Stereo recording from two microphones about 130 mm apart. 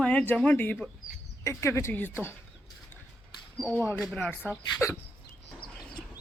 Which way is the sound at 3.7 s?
15° left (ahead or behind).